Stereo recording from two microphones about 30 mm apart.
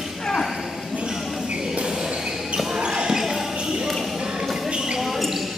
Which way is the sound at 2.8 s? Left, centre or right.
Right.